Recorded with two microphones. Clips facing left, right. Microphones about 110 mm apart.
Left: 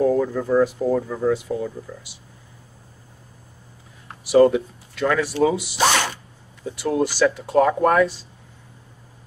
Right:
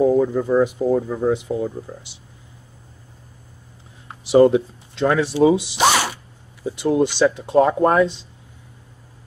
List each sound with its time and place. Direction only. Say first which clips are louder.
0.0 s speech: right 3 dB; 15° right (ahead or behind)
4.2 s speech: right 2 dB; 25° right (ahead or behind)